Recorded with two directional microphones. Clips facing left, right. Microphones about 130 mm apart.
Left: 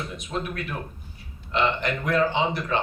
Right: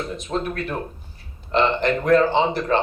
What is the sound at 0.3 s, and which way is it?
A man's voice, 35° right (ahead or behind).